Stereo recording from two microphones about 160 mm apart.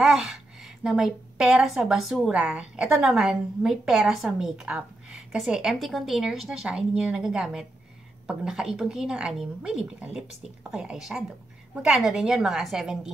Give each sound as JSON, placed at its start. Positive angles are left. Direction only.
{"t": 0.0, "sound": "a woman's voice", "side_deg": -5}